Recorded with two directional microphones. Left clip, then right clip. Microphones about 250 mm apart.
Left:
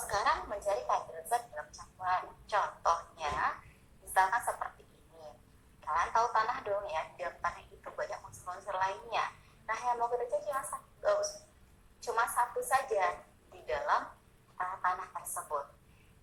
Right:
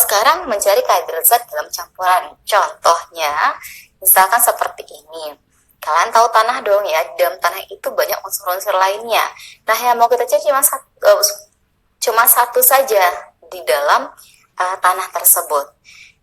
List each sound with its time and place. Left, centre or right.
0.1 s a woman's voice: right
5.8 s a woman's voice: right